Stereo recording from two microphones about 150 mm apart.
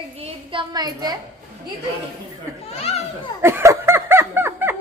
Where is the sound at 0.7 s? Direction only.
25° right (ahead or behind).